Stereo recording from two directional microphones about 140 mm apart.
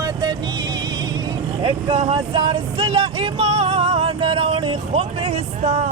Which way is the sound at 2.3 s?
30° right (ahead or behind).